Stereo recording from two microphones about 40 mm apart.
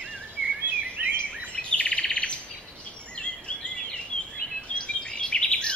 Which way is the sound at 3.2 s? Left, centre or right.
Left.